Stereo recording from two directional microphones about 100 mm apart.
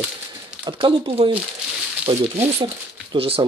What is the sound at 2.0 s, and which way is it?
Speech, 80° right.